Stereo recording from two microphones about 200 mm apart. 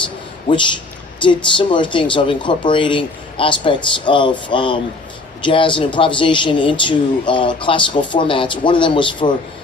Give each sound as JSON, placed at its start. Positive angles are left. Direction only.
{"t": 0.5, "sound": "speech", "side_deg": 25}